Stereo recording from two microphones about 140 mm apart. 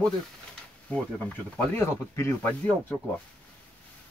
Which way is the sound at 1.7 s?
20° left (ahead or behind).